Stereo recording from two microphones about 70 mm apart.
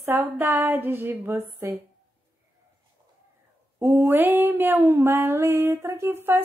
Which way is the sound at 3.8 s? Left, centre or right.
Right.